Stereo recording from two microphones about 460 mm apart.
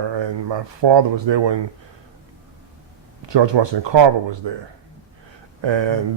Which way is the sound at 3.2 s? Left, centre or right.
Right.